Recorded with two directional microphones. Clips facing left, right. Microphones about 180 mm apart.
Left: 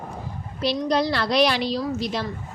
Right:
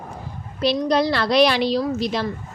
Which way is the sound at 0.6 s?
70° right (ahead or behind).